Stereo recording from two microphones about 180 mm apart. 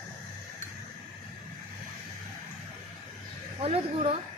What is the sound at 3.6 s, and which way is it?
Speech, 35° right (ahead or behind).